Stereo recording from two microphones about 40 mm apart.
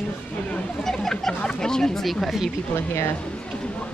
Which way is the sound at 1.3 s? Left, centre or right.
Left.